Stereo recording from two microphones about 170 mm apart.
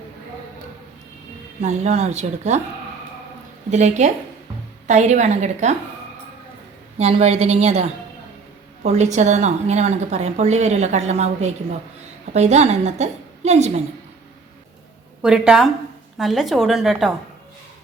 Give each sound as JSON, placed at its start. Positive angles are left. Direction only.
{"t": 1.6, "sound": "a woman's voice", "side_deg": -40}
{"t": 3.7, "sound": "a woman's voice", "side_deg": -45}
{"t": 7.0, "sound": "a woman's voice", "side_deg": -35}
{"t": 15.2, "sound": "a woman's voice", "side_deg": -5}